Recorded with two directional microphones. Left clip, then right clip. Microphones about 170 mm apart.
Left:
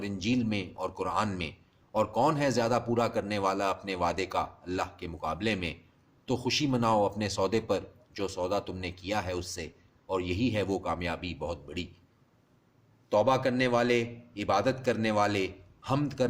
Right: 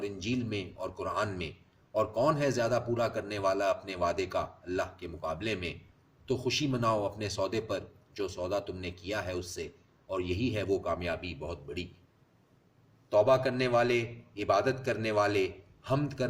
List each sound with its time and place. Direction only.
0.0 s a man's voice: 45° left (ahead or behind)
13.1 s a man's voice: 40° left (ahead or behind)